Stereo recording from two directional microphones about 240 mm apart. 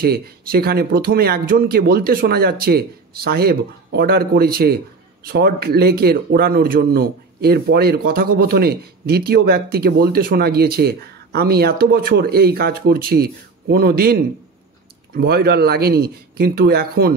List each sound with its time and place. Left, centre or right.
0.0 s speech: right
15.1 s speech: right